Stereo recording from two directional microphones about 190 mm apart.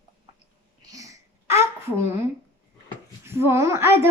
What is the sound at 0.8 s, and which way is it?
Babbling, 20° right (ahead or behind).